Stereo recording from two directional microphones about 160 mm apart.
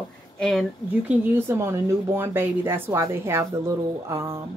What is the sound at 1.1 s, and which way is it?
A woman's voice, 15° right (ahead or behind).